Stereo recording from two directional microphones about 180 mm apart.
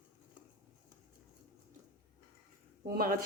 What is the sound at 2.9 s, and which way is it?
Speech, 55° right (ahead or behind).